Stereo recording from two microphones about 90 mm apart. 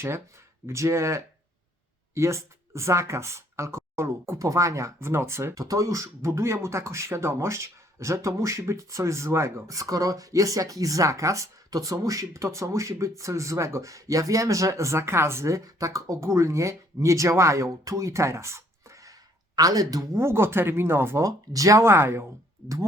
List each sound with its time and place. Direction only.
0.7 s speech: 30° right (ahead or behind)